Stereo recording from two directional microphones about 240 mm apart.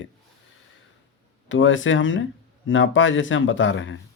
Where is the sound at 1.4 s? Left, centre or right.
Left.